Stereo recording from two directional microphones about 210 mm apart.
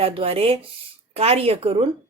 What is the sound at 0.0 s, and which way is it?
A woman's voice, 25° right (ahead or behind).